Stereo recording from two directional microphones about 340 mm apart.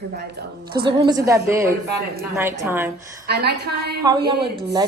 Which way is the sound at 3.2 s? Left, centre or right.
Right.